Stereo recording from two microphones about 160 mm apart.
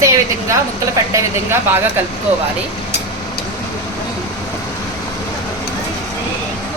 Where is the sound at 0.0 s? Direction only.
20° right (ahead or behind).